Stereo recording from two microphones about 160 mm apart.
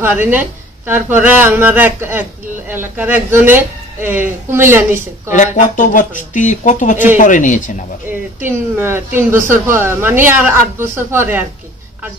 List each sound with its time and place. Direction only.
0.0 s speech: 10° right (ahead or behind)
5.3 s speech: 55° left (ahead or behind)
8.5 s speech: 15° right (ahead or behind)